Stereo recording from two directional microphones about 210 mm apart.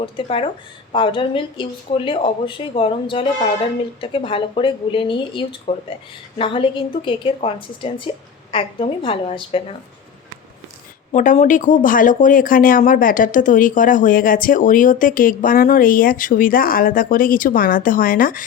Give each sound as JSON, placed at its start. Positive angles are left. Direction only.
{"t": 0.0, "sound": "speech", "side_deg": 25}
{"t": 11.1, "sound": "speech", "side_deg": 35}